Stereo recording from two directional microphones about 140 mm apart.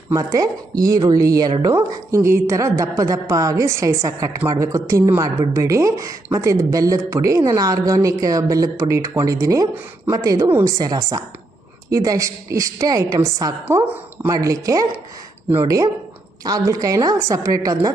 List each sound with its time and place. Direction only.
0.1 s a woman's voice: 25° right (ahead or behind)